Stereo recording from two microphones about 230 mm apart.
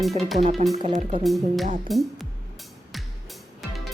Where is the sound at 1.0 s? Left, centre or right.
Right.